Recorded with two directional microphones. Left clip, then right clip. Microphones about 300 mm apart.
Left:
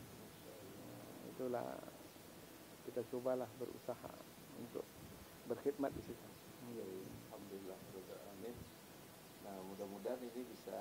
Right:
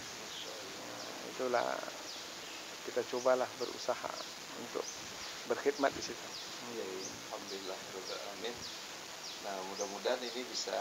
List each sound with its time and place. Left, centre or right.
1.4 s speech: centre
3.0 s speech: centre
5.5 s speech: centre
9.5 s speech: centre